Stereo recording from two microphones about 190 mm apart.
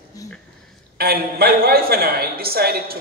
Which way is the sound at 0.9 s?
55° right (ahead or behind).